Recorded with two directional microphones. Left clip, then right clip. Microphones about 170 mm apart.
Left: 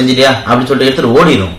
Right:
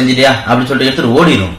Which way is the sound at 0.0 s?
15° left (ahead or behind).